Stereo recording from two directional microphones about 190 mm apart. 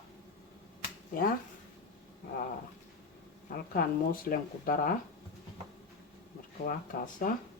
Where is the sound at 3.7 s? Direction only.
50° left (ahead or behind).